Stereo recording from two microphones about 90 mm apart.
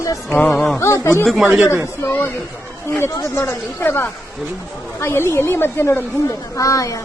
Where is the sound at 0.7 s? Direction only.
30° left (ahead or behind).